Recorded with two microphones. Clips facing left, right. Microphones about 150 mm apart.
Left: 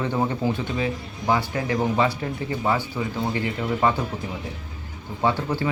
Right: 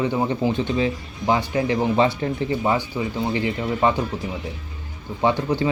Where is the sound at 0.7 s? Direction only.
30° right (ahead or behind).